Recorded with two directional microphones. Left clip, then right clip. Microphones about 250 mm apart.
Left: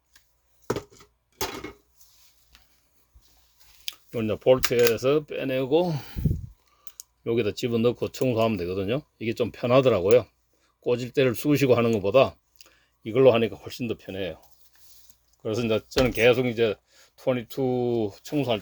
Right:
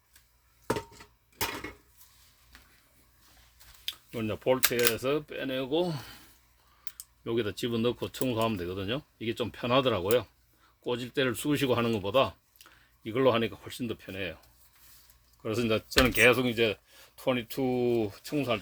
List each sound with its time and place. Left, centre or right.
3.8 s speech: centre
15.4 s speech: centre